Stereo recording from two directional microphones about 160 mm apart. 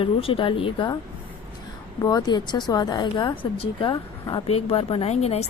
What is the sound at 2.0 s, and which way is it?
A woman's voice, 25° left (ahead or behind).